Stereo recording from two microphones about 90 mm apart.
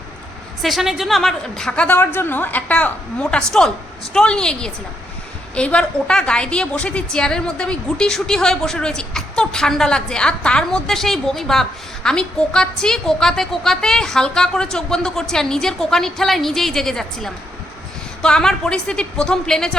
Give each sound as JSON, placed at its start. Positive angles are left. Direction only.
{"t": 0.6, "sound": "a woman's voice", "side_deg": 0}
{"t": 2.1, "sound": "a woman's voice", "side_deg": 20}